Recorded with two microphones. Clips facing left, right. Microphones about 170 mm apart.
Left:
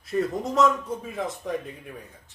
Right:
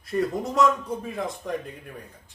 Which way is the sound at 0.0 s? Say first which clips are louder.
Even; centre (ahead or behind).